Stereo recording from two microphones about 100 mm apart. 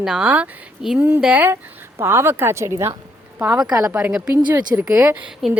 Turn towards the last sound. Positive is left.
turn(degrees=-5)  # may be behind; listen again after turning